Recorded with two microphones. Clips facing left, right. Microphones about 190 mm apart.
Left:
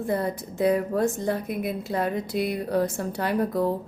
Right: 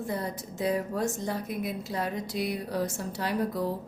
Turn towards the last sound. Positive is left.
turn(degrees=55)  # may be behind; listen again after turning